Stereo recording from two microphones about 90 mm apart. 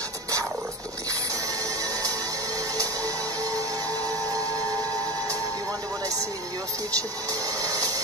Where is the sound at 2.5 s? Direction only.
40° right (ahead or behind).